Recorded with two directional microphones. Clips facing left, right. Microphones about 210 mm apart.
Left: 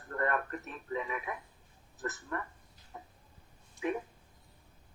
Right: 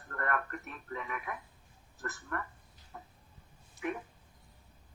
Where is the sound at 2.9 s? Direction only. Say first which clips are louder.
Left 1 dB; 20° left (ahead or behind).